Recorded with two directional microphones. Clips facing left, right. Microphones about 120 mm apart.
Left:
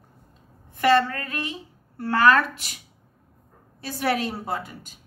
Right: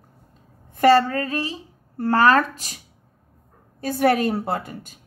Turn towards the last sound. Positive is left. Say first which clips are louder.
# right 4 dB
turn(degrees=-55)  # may be behind; listen again after turning